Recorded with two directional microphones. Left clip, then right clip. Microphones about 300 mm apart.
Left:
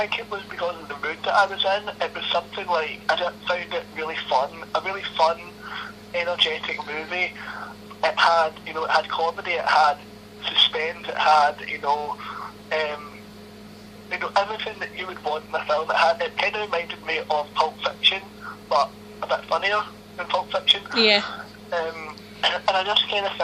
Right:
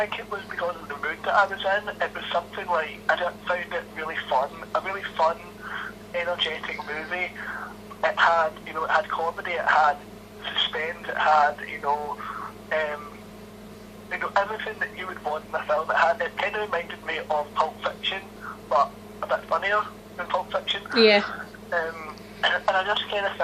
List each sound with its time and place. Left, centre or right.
0.0 s speech: left
14.1 s speech: left